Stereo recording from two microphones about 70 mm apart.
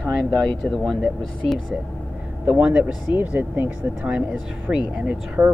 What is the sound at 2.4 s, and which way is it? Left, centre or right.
Speech, centre.